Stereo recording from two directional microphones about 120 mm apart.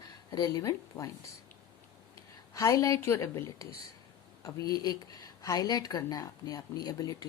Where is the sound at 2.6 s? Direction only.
25° left (ahead or behind).